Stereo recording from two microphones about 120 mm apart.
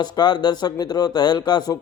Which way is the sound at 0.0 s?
35° left (ahead or behind).